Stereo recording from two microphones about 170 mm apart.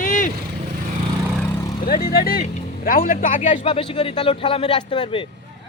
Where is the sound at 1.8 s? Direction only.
60° left (ahead or behind).